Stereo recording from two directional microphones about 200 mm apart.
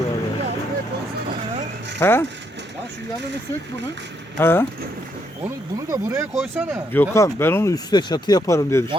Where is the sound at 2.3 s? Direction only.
60° right (ahead or behind).